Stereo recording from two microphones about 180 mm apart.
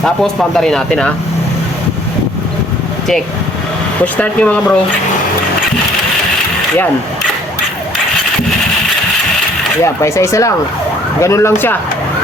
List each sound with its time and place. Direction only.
0.0 s speech: centre (ahead or behind)
4.0 s speech: 10° left (ahead or behind)
9.8 s speech: 15° left (ahead or behind)